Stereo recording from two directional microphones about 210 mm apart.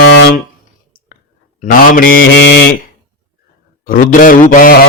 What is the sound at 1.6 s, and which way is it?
Speech, 40° left (ahead or behind).